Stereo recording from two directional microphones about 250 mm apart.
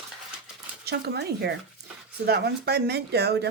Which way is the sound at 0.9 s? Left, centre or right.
Right.